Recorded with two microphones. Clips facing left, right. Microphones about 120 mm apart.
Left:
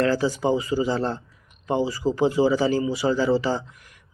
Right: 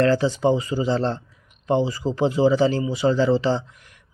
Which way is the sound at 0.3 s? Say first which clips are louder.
Right 2 dB; 25° right (ahead or behind).